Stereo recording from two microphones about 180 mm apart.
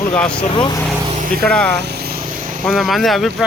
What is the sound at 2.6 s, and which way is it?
Speech, centre (ahead or behind).